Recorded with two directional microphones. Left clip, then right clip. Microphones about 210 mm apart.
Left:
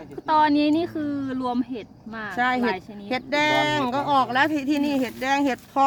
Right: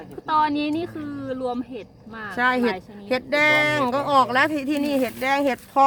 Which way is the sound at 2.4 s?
5° right (ahead or behind).